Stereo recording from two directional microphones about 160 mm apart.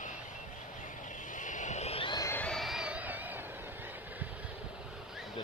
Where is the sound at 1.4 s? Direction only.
50° left (ahead or behind); by 2.3 s 30° left (ahead or behind).